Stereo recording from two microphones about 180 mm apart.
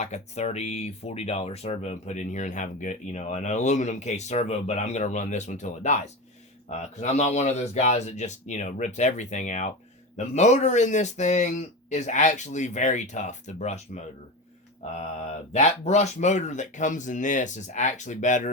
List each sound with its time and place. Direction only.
0.0 s speech: 40° left (ahead or behind)